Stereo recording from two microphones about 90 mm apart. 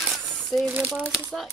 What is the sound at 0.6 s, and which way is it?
Speech, 20° right (ahead or behind).